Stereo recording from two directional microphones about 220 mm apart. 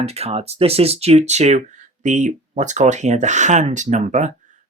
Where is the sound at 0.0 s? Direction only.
30° right (ahead or behind).